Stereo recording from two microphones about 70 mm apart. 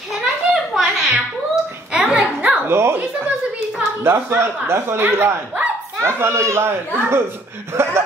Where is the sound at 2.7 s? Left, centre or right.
Right.